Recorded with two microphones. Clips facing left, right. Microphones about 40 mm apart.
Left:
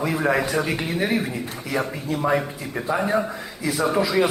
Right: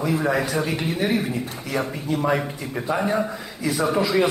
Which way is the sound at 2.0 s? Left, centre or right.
Centre.